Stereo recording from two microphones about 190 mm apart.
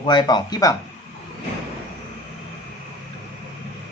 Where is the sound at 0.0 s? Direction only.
25° left (ahead or behind).